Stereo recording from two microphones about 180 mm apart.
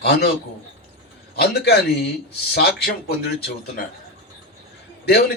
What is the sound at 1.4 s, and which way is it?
Speech, 60° left (ahead or behind).